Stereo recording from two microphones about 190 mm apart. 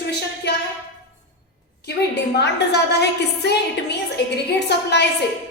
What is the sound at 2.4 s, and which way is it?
A woman's voice, 60° left (ahead or behind).